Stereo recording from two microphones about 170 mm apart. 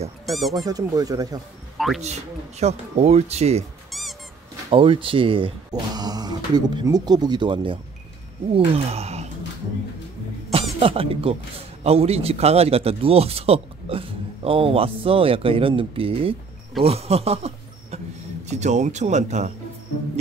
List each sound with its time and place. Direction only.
0.3 s speech: centre (ahead or behind)
0.6 s speech: 20° right (ahead or behind)
1.8 s speech: centre (ahead or behind)
2.6 s speech: 40° right (ahead or behind)
4.6 s speech: 30° right (ahead or behind)
8.5 s a sound: 35° right (ahead or behind)
10.8 s speech: 35° right (ahead or behind)
18.5 s speech: 45° right (ahead or behind)